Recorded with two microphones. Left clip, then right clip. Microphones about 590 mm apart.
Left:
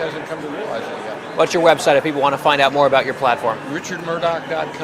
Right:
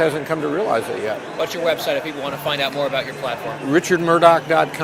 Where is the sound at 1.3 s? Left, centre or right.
Left.